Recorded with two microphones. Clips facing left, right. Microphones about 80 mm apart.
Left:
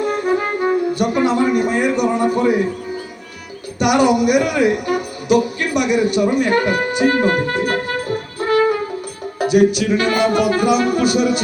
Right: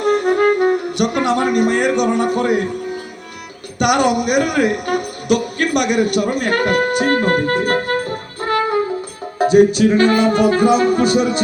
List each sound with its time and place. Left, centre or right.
0.0 s speech: right
3.8 s speech: right
9.4 s music: right